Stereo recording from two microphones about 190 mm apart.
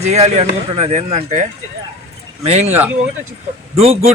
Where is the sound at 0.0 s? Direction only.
35° right (ahead or behind).